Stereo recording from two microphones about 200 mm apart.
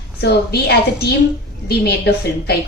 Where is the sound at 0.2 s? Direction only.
55° left (ahead or behind).